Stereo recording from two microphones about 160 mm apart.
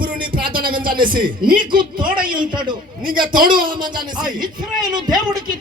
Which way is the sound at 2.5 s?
30° right (ahead or behind).